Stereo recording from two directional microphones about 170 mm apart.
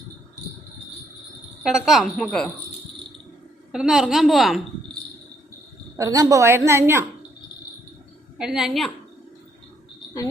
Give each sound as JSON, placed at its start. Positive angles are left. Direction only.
{"t": 1.6, "sound": "a woman's voice", "side_deg": 0}
{"t": 3.7, "sound": "a woman's voice", "side_deg": -5}
{"t": 6.0, "sound": "a woman's voice", "side_deg": -20}
{"t": 8.4, "sound": "a woman's voice", "side_deg": -5}